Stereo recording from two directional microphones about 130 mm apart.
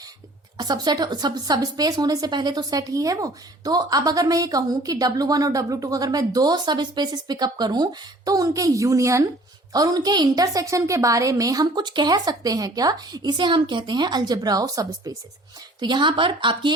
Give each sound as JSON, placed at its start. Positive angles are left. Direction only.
{"t": 0.5, "sound": "speech", "side_deg": -30}